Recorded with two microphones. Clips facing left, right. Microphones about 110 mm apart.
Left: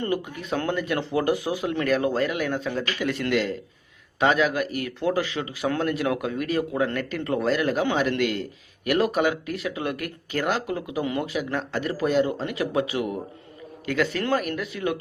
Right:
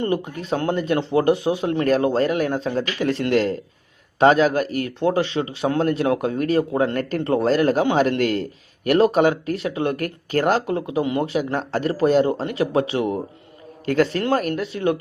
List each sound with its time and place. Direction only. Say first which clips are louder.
0.0 s a man's voice: right 4 dB; 25° right (ahead or behind)